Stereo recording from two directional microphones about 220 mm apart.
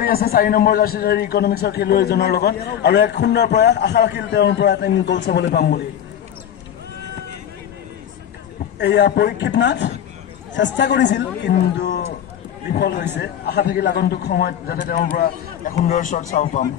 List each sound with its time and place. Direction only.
0.0 s a man's voice: 45° left (ahead or behind)
8.7 s a man's voice: 50° left (ahead or behind); by 16.3 s 35° left (ahead or behind)